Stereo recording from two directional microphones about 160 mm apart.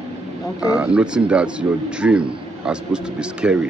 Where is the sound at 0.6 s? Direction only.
5° right (ahead or behind).